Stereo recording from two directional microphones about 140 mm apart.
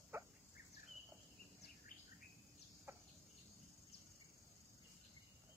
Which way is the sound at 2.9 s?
20° right (ahead or behind).